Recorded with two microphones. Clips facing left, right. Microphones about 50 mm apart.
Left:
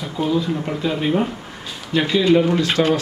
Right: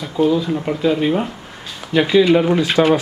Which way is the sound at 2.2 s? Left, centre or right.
Right.